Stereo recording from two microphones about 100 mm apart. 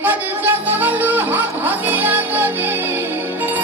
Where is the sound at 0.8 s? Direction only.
20° right (ahead or behind).